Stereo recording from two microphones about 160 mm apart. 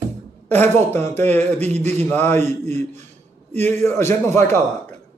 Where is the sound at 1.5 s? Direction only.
40° right (ahead or behind).